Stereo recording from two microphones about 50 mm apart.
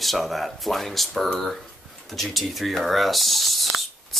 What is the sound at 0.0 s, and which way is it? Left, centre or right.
Speech, centre.